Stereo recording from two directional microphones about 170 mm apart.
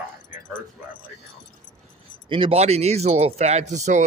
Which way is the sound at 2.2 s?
30° right (ahead or behind).